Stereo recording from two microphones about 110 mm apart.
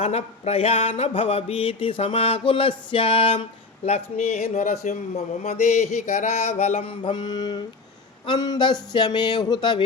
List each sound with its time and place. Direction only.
0.0 s mantra: 70° left (ahead or behind); by 3.4 s 50° left (ahead or behind)
3.8 s speech: 75° left (ahead or behind); by 7.6 s 40° left (ahead or behind)
8.3 s a sound: 40° left (ahead or behind)